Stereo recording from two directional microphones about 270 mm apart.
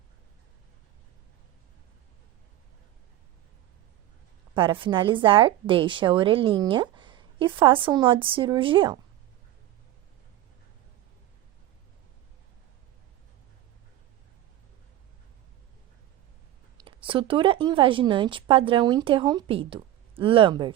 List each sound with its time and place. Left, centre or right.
4.5 s a woman's voice: centre
16.8 s a woman's voice: centre